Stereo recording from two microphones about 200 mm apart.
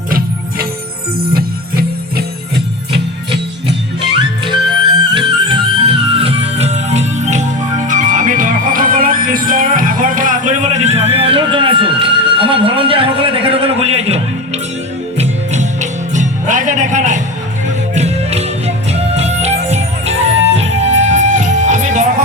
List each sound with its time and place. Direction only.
4.4 s music: 25° right (ahead or behind)